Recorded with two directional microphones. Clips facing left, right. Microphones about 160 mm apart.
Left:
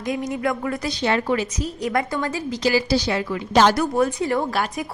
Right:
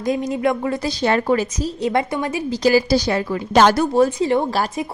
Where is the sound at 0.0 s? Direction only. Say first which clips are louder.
Right 4 dB; 30° right (ahead or behind).